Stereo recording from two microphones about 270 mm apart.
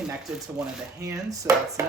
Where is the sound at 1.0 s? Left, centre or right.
Centre.